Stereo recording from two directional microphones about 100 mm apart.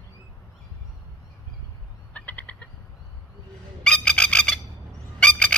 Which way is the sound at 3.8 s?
10° left (ahead or behind).